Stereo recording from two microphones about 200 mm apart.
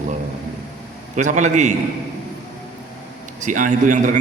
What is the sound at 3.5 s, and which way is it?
Speech, 40° right (ahead or behind).